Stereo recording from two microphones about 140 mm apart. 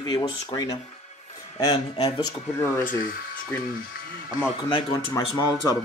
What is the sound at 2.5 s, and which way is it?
Speech, 20° left (ahead or behind).